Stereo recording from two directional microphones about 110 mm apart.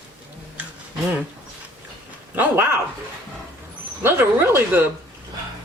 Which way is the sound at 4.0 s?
20° right (ahead or behind).